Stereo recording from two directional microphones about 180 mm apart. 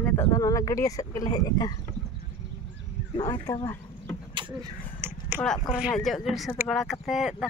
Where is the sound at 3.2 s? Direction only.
30° left (ahead or behind).